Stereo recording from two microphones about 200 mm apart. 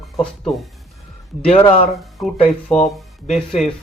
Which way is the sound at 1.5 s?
25° left (ahead or behind).